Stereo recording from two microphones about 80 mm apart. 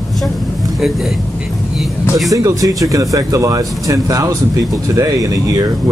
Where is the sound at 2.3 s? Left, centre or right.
Right.